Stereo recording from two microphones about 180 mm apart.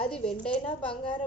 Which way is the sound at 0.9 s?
25° left (ahead or behind).